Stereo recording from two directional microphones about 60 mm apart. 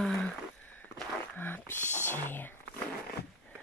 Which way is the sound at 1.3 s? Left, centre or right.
Left.